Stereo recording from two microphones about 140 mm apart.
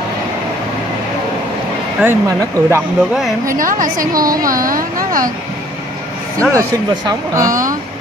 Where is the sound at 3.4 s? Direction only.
75° right (ahead or behind).